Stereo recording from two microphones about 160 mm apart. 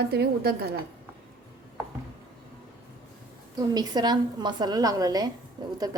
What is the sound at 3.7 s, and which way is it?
A woman's voice, 25° right (ahead or behind).